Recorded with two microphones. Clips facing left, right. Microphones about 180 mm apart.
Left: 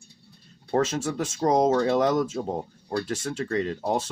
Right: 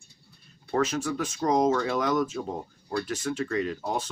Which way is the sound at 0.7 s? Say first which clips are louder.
Left 2 dB; 30° left (ahead or behind).